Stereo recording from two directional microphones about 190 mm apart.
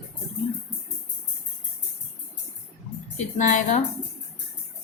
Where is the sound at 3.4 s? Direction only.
40° left (ahead or behind).